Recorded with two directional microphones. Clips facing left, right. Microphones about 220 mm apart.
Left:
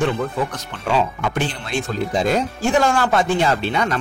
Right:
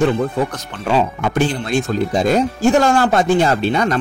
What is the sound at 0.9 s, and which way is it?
A man's voice, 40° right (ahead or behind).